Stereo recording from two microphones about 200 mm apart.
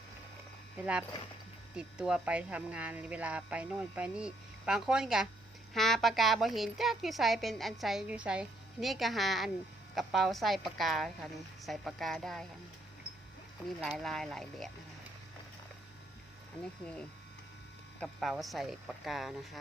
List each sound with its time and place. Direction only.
1.7 s a woman's voice: 5° right (ahead or behind)
13.7 s a woman's voice: centre (ahead or behind)
18.0 s a woman's voice: centre (ahead or behind)